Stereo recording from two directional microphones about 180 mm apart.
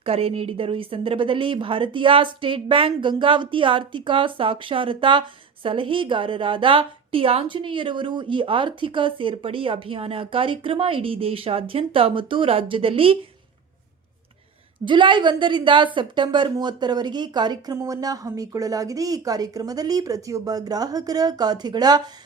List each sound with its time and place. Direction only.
0.0 s a woman's voice: 30° right (ahead or behind)
14.8 s a woman's voice: 25° right (ahead or behind)